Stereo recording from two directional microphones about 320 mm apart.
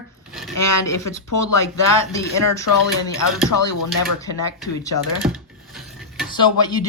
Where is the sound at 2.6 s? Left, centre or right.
Left.